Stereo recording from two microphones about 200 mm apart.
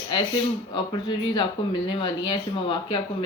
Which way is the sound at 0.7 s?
25° left (ahead or behind).